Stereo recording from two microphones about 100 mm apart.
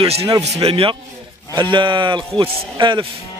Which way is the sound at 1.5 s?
50° right (ahead or behind).